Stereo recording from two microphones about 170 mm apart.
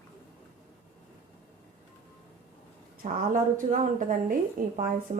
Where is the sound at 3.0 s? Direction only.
50° right (ahead or behind).